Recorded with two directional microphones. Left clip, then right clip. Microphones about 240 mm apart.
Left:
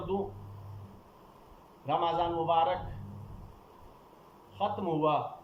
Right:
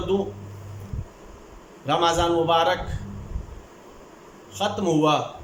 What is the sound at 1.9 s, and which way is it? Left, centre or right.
Speech, right.